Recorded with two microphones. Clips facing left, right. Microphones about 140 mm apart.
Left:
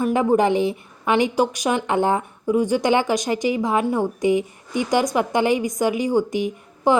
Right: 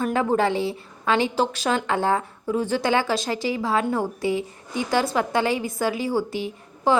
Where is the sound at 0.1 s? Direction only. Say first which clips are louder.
Left 5 dB; 15° left (ahead or behind).